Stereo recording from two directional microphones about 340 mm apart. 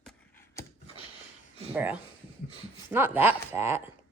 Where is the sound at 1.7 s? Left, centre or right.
Centre.